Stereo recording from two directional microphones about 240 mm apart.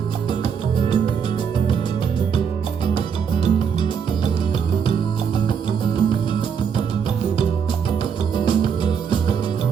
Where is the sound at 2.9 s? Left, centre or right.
Left.